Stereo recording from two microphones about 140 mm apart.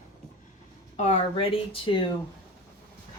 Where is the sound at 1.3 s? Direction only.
40° left (ahead or behind).